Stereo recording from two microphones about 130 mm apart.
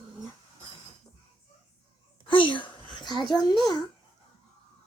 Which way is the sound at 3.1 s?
35° left (ahead or behind).